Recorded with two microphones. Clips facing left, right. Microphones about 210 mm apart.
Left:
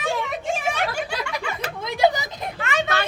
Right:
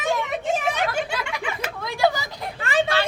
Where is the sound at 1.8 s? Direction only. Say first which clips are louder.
Left 2 dB; 20° left (ahead or behind).